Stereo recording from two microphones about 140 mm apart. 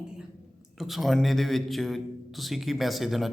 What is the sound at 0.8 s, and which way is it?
A man's voice, centre (ahead or behind).